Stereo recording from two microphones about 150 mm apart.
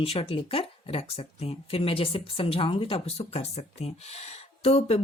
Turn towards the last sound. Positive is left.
turn(degrees=45)  # may be behind; listen again after turning